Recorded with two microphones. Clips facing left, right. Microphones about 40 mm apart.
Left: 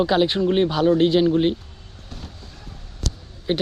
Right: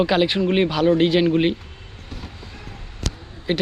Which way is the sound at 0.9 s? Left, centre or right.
Right.